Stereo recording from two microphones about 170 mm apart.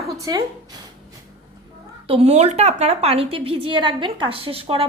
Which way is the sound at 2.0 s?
35° right (ahead or behind).